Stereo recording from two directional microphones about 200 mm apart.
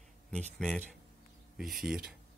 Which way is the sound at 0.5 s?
5° left (ahead or behind).